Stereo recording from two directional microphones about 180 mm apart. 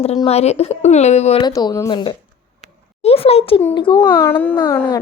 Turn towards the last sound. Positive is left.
turn(degrees=15)  # may be behind; listen again after turning